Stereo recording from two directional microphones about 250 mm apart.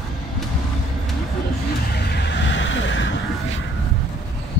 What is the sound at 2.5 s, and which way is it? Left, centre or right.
Vehicle, left.